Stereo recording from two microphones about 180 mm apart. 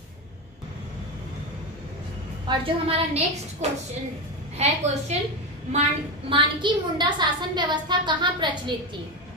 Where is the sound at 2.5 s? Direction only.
30° right (ahead or behind).